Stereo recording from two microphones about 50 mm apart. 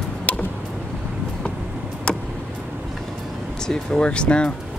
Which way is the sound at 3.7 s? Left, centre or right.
Centre.